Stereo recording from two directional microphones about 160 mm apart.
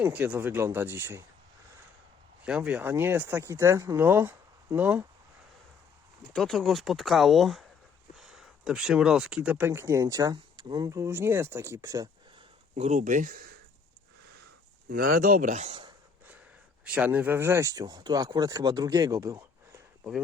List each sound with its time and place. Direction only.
0.0 s speech: 10° right (ahead or behind)
2.4 s speech: 5° right (ahead or behind)
6.3 s speech: 5° left (ahead or behind); by 12.0 s 20° right (ahead or behind)
12.7 s speech: 45° right (ahead or behind); by 13.5 s 65° right (ahead or behind)
14.8 s speech: 75° right (ahead or behind); by 15.7 s 50° right (ahead or behind)
16.8 s speech: 10° right (ahead or behind)